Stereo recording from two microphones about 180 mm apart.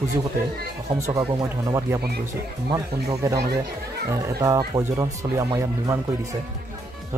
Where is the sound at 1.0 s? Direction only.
15° right (ahead or behind).